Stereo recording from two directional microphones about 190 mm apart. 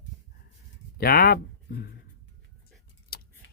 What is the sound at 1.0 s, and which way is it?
Speech, 50° left (ahead or behind).